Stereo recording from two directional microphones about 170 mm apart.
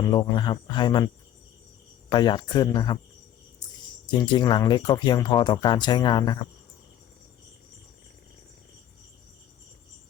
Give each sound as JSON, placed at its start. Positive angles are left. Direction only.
{"t": 0.1, "sound": "speech", "side_deg": 25}
{"t": 4.1, "sound": "speech", "side_deg": 25}